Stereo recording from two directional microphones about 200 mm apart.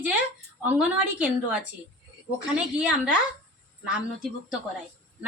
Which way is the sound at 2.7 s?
5° right (ahead or behind).